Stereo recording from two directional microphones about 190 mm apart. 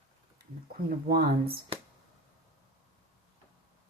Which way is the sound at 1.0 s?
55° right (ahead or behind).